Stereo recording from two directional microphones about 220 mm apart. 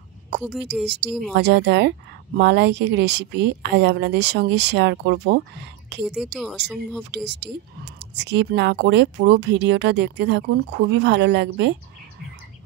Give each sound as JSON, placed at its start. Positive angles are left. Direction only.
{"t": 0.4, "sound": "speech", "side_deg": -5}
{"t": 0.8, "sound": "speech", "side_deg": -50}
{"t": 6.0, "sound": "speech", "side_deg": 0}
{"t": 7.2, "sound": "speech", "side_deg": -50}